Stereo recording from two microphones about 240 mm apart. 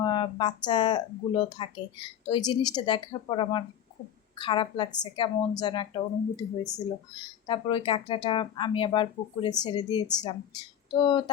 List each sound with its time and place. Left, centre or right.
0.0 s speech: centre
7.4 s speech: left